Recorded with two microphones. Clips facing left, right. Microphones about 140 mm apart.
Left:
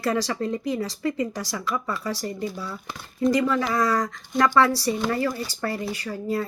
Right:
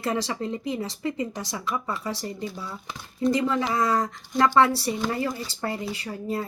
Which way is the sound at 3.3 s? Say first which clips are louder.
Left 2 dB; 25° right (ahead or behind).